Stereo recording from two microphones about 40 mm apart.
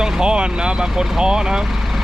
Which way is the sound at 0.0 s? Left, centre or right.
Right.